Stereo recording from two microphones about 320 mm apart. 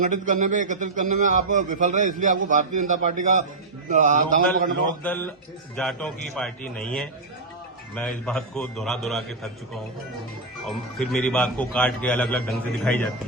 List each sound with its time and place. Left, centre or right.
0.0 s a man's voice: right
5.0 s a man's voice: centre